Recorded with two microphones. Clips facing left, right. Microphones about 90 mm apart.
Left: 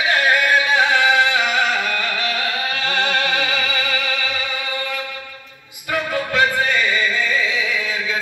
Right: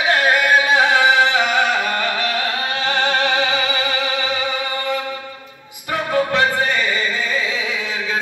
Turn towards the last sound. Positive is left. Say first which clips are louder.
# left 1 dB
turn(degrees=-30)  # may be behind; listen again after turning